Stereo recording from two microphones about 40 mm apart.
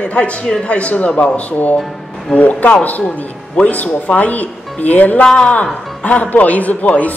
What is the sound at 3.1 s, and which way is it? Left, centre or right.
Speech, left.